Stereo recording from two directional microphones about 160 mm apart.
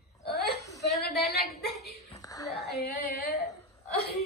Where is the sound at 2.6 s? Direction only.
80° left.